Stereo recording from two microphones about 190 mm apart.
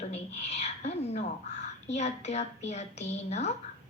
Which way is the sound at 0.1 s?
35° left (ahead or behind).